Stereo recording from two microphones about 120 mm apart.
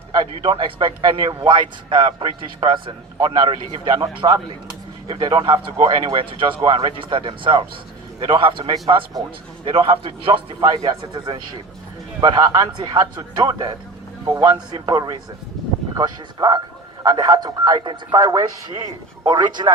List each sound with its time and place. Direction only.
0.1 s a man's voice: 40° right (ahead or behind)
1.3 s a man's voice: 30° right (ahead or behind)
1.5 s a man's voice: 45° right (ahead or behind)